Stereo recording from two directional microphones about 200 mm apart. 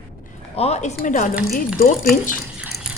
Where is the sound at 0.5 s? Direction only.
30° left (ahead or behind).